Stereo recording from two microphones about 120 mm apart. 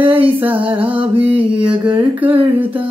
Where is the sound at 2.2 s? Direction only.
15° right (ahead or behind).